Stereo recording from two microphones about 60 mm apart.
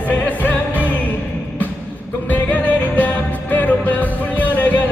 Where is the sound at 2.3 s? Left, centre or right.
Left.